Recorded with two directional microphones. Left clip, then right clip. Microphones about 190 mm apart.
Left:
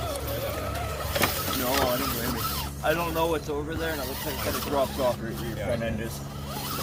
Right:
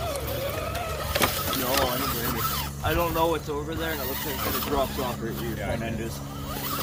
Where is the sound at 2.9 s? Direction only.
40° left (ahead or behind).